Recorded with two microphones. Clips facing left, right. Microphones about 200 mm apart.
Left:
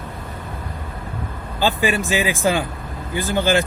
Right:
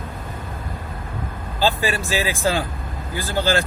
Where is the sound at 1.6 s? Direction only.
15° left (ahead or behind).